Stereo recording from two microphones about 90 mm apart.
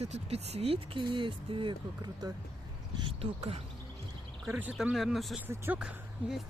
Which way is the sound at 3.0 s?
70° right (ahead or behind).